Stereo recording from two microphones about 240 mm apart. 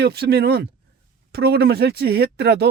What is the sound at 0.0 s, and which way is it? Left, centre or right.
Speech, right.